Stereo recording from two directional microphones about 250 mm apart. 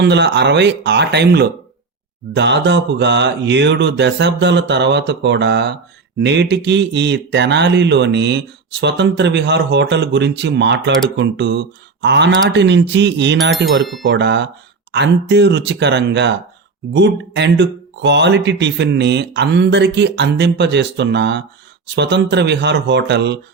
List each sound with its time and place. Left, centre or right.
0.0 s speech: right